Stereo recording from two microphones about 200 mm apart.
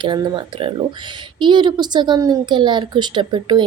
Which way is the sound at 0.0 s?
25° right (ahead or behind).